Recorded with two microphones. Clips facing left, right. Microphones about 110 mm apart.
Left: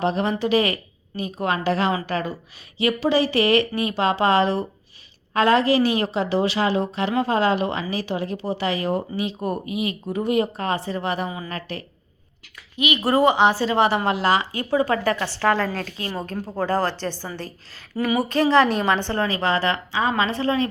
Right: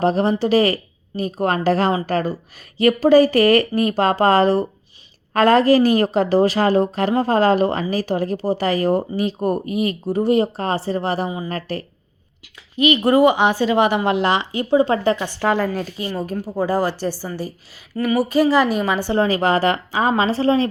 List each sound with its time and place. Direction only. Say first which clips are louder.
0.0 s a woman's voice: right 5 dB; 40° right (ahead or behind)
13.0 s a woman's voice: right 1 dB; 15° right (ahead or behind)
19.1 s a woman's voice: right 5 dB; 35° right (ahead or behind)